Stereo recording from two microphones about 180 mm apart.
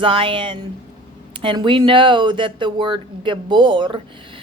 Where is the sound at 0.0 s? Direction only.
30° right (ahead or behind).